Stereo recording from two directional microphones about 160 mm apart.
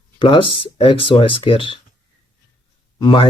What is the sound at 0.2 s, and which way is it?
Speech, 30° left (ahead or behind).